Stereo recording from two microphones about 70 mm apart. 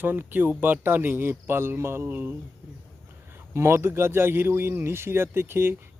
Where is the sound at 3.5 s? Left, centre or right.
Right.